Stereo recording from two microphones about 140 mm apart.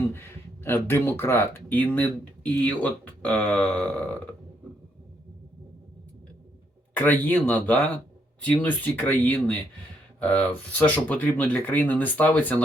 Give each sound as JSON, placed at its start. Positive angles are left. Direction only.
{"t": 0.1, "sound": "speech", "side_deg": 15}
{"t": 6.9, "sound": "speech", "side_deg": 15}